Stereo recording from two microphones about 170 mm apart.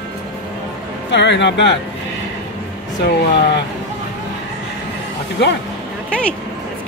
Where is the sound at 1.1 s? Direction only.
90° left.